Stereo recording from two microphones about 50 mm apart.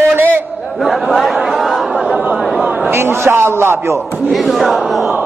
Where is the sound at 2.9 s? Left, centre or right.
Right.